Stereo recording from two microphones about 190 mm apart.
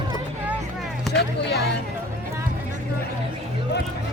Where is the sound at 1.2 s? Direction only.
60° left (ahead or behind).